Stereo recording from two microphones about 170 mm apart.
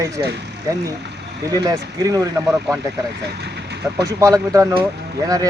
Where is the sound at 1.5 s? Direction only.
20° right (ahead or behind).